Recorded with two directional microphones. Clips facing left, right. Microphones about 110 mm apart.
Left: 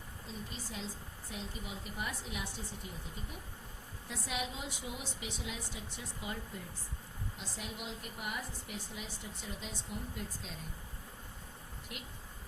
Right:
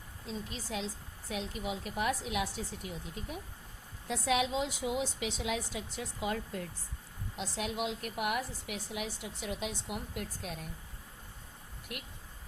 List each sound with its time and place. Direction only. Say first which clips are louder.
0.3 s a woman's voice: right 6 dB; 90° right; by 10.7 s 60° right (ahead or behind)
11.9 s speech: right 4 dB; 60° right (ahead or behind)